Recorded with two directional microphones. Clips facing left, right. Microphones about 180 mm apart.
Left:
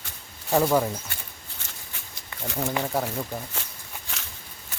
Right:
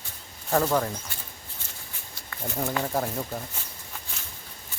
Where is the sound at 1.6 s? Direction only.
90° left.